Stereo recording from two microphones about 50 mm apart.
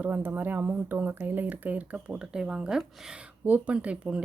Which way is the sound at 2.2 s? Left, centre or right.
Centre.